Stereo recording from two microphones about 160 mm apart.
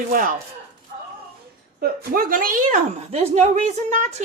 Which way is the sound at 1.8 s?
65° right (ahead or behind).